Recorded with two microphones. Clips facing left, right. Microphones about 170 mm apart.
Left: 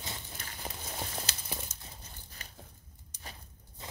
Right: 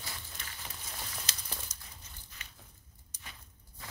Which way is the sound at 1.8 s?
35° left (ahead or behind).